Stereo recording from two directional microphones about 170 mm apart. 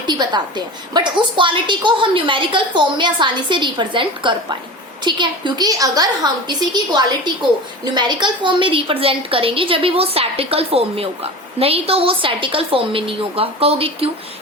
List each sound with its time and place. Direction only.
0.1 s a woman's voice: 25° right (ahead or behind)